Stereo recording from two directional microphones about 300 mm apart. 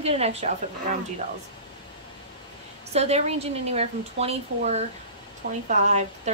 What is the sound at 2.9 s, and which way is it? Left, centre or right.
Speech, right.